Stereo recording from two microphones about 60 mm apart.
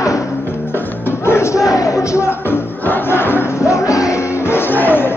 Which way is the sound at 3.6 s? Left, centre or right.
Left.